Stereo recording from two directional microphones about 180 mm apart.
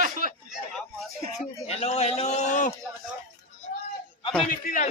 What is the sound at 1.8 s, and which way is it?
Speech, 35° left (ahead or behind).